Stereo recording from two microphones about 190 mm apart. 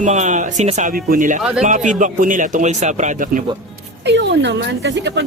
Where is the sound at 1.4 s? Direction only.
5° right (ahead or behind).